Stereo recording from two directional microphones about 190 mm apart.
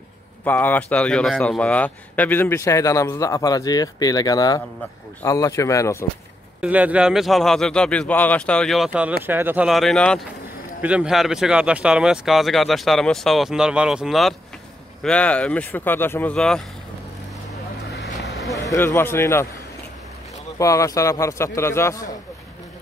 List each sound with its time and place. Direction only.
0.5 s a man's voice: 10° left (ahead or behind)
6.6 s a man's voice: 5° right (ahead or behind)
18.6 s a man's voice: 15° left (ahead or behind)
20.5 s a man's voice: 15° left (ahead or behind)